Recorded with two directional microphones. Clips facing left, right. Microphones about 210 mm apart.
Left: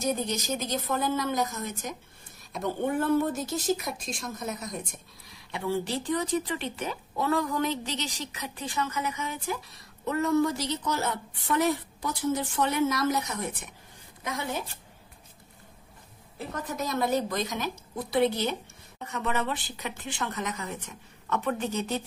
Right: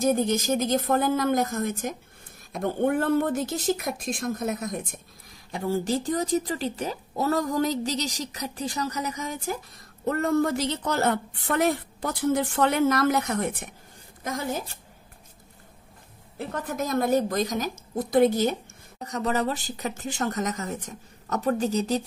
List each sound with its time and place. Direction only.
0.0 s speech: 50° right (ahead or behind)
14.2 s a woman's voice: 40° right (ahead or behind)
16.6 s a woman's voice: 50° right (ahead or behind)